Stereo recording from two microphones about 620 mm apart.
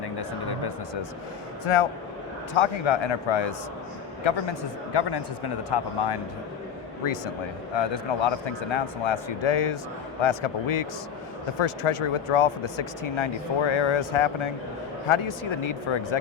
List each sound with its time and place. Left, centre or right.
1.6 s a man's voice: left
7.8 s speech: left
15.9 s speech: left